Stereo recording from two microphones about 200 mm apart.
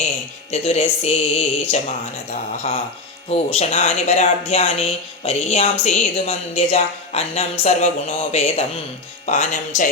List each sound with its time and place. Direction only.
0.5 s speech: 30° left (ahead or behind)
3.2 s speech: 30° left (ahead or behind)